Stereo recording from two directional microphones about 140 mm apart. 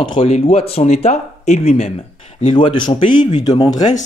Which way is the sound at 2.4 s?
35° left (ahead or behind).